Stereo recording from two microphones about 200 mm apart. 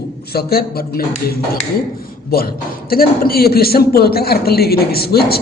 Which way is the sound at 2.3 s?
50° left (ahead or behind).